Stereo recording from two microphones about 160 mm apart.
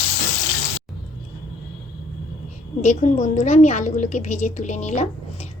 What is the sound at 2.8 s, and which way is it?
A woman's voice, 50° left (ahead or behind).